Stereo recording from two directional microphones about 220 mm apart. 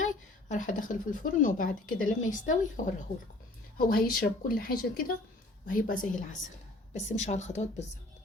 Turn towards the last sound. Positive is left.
turn(degrees=30)  # may be behind; listen again after turning